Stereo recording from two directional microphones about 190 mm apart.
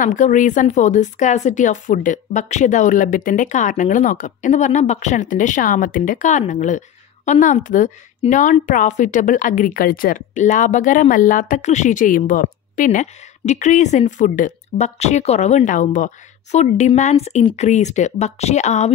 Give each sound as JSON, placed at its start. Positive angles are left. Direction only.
{"t": 0.0, "sound": "a woman's voice", "side_deg": 40}